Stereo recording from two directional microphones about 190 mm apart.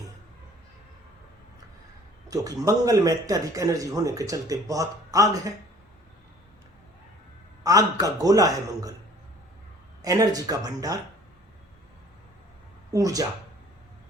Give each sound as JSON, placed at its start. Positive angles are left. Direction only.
{"t": 2.2, "sound": "a man's voice", "side_deg": -20}
{"t": 7.6, "sound": "a man's voice", "side_deg": -20}
{"t": 10.0, "sound": "a man's voice", "side_deg": -20}
{"t": 12.9, "sound": "a man's voice", "side_deg": -20}